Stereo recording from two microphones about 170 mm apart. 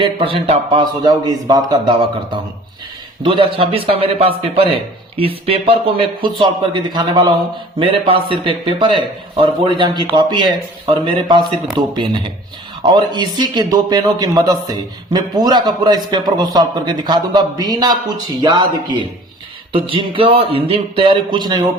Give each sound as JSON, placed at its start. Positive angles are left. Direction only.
{"t": 0.0, "sound": "a man's voice", "side_deg": -35}
{"t": 1.0, "sound": "a man's voice", "side_deg": -25}